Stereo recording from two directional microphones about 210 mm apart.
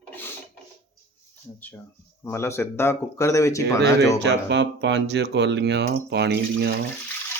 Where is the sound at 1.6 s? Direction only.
10° left (ahead or behind).